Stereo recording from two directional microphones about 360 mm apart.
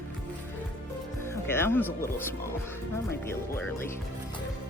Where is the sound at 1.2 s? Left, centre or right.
Centre.